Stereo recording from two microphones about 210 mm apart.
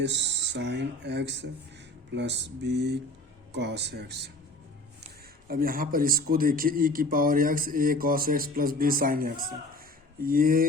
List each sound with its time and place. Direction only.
0.0 s a man's voice: 55° right (ahead or behind)
5.5 s a man's voice: 45° right (ahead or behind)
9.7 s a sound: 45° right (ahead or behind)